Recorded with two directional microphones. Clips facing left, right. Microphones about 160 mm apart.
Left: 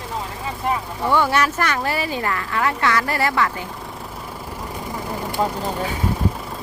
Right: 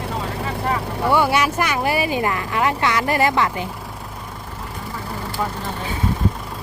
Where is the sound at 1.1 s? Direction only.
10° right (ahead or behind).